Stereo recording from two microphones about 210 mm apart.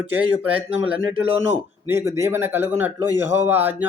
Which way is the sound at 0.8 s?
5° right (ahead or behind).